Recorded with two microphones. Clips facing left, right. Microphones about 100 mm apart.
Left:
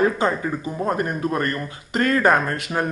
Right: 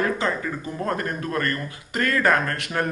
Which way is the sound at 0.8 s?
15° left (ahead or behind).